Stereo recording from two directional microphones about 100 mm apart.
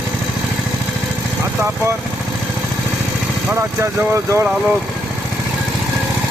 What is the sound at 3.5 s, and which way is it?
Speech, 30° right (ahead or behind).